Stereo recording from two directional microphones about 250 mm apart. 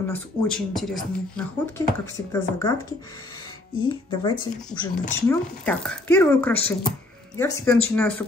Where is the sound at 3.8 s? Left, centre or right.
Centre.